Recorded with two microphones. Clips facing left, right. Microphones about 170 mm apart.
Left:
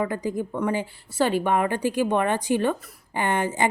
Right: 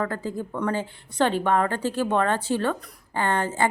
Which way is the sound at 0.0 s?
15° left (ahead or behind).